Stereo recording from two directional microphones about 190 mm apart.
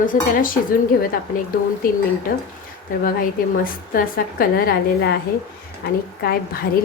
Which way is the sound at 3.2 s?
50° left (ahead or behind).